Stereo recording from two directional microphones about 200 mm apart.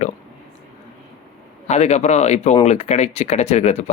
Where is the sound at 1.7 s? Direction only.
35° left (ahead or behind).